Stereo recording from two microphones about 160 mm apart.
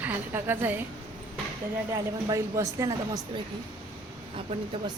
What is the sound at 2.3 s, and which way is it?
Speech, 20° right (ahead or behind).